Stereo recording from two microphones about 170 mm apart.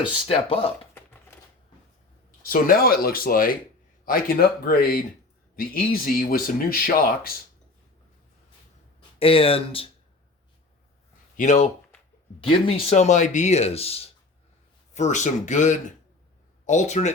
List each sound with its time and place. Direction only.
0.0 s speech: 35° left (ahead or behind)
2.4 s speech: 60° left (ahead or behind)
9.1 s speech: 35° left (ahead or behind)
11.3 s speech: 45° left (ahead or behind)
12.4 s speech: 30° left (ahead or behind)